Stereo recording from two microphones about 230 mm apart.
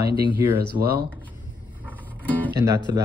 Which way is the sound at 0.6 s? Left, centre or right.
Right.